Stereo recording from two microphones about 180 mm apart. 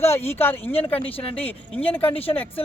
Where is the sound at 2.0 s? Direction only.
30° left (ahead or behind).